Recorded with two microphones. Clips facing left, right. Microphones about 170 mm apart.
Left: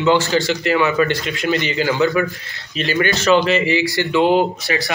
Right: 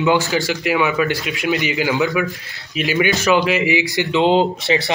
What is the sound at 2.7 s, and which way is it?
A man's voice, 10° right (ahead or behind).